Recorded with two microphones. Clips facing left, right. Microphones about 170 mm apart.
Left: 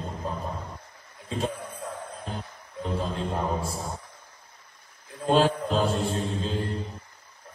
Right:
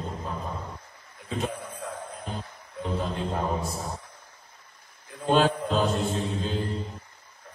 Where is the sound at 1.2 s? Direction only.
35° left (ahead or behind).